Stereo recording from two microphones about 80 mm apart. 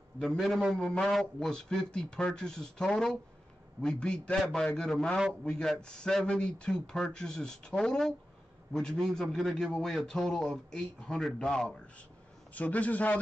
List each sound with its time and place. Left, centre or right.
0.2 s a man's voice: centre
0.7 s a man's voice: centre
12.5 s a man's voice: centre